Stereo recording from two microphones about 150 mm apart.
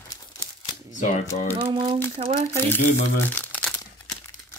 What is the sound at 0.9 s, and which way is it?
Speech, 55° left (ahead or behind).